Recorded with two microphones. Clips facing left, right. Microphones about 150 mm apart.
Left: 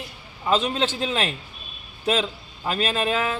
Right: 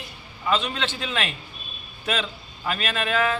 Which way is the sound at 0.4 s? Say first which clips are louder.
Left 3 dB; 30° left (ahead or behind).